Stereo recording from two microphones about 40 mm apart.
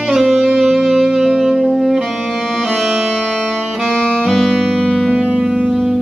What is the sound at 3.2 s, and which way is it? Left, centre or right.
Music, left.